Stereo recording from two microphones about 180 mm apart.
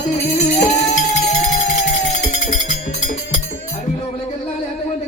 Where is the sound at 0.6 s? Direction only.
40° left (ahead or behind).